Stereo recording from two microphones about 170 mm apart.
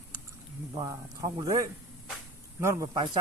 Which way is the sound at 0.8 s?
20° right (ahead or behind).